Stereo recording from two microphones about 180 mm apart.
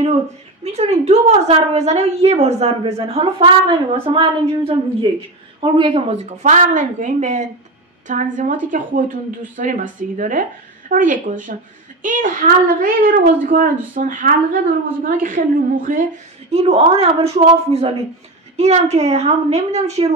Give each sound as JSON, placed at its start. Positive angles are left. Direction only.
{"t": 0.7, "sound": "a woman's voice", "side_deg": -35}
{"t": 16.5, "sound": "a woman's voice", "side_deg": -35}